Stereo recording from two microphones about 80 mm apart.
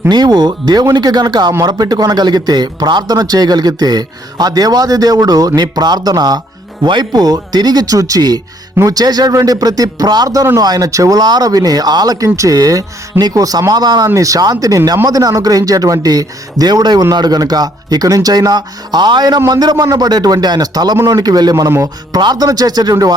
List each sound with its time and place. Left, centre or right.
0.1 s a man's voice: right
6.8 s a man's voice: right
14.2 s a man's voice: right